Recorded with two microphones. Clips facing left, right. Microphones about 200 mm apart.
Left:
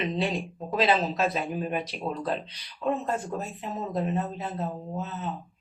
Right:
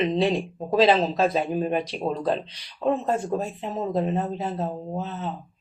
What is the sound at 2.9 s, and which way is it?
Speech, 30° right (ahead or behind).